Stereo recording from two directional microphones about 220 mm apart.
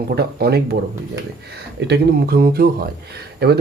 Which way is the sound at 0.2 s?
45° right (ahead or behind).